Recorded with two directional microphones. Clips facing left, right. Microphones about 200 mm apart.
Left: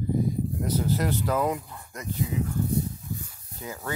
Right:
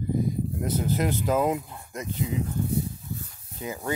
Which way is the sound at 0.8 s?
20° right (ahead or behind).